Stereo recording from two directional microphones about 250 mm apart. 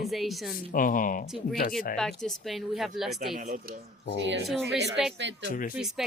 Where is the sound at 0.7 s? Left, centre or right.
Left.